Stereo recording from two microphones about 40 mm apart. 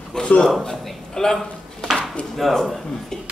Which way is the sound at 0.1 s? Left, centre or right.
Left.